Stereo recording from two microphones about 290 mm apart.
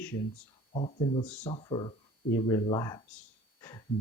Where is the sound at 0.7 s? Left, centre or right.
Left.